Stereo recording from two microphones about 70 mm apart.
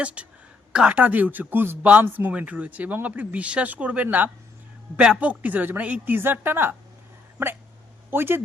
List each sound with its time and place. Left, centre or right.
0.0 s a woman's voice: centre
8.1 s a woman's voice: right